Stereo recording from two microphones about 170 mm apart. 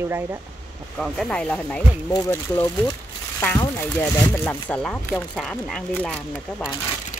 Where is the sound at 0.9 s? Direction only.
Centre (ahead or behind).